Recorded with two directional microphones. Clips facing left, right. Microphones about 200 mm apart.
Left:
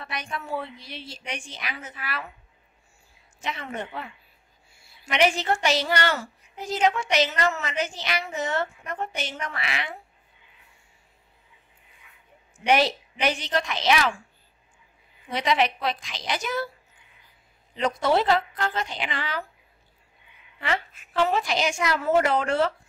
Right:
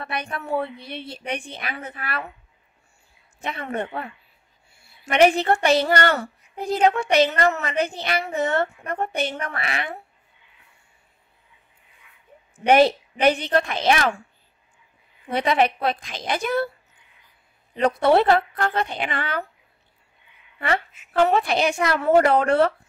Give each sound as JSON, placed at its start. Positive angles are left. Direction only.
{"t": 0.0, "sound": "speech", "side_deg": -60}
{"t": 3.3, "sound": "speech", "side_deg": -60}
{"t": 12.5, "sound": "a woman's voice", "side_deg": -55}
{"t": 15.2, "sound": "a woman's voice", "side_deg": -55}
{"t": 17.7, "sound": "speech", "side_deg": -60}
{"t": 20.5, "sound": "speech", "side_deg": -55}